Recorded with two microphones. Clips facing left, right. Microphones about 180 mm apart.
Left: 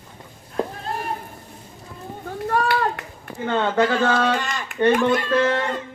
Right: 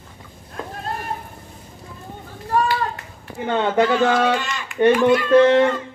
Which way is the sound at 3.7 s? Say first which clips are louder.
Right 3 dB; 15° right (ahead or behind).